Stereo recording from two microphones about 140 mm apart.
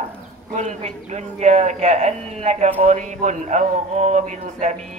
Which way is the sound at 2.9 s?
60° right (ahead or behind).